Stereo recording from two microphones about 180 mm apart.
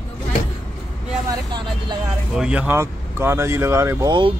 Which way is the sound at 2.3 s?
5° right (ahead or behind).